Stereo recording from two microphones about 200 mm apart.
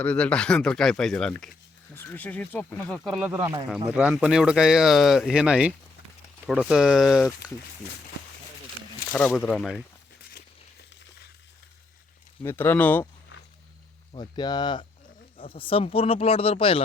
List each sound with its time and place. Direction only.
0.0 s speech: 5° left (ahead or behind)
9.1 s speech: 5° left (ahead or behind)
12.4 s speech: 10° left (ahead or behind)
14.1 s speech: 20° left (ahead or behind)